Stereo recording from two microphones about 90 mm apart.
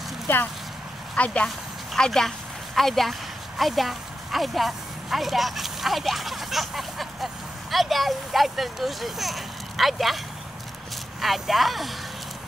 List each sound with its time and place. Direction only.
0.3 s speech: 20° left (ahead or behind); by 11.9 s centre (ahead or behind)